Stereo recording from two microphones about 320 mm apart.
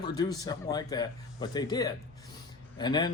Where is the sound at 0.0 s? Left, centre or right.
Centre.